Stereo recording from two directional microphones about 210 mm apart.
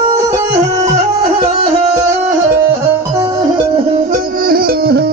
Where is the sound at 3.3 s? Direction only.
20° right (ahead or behind).